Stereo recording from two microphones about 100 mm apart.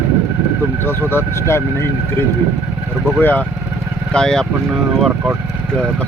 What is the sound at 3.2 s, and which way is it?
Speech, 15° left (ahead or behind).